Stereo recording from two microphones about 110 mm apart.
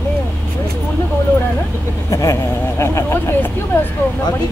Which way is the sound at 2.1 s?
30° left (ahead or behind).